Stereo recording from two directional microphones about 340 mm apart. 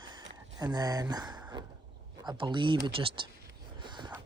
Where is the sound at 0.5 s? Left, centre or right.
Centre.